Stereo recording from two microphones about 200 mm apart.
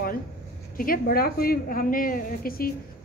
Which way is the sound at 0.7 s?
45° left (ahead or behind).